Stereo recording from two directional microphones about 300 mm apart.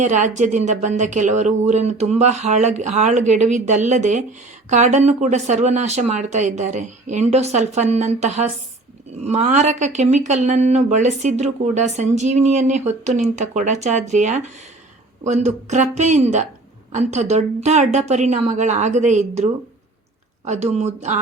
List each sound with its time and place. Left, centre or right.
0.0 s speech: right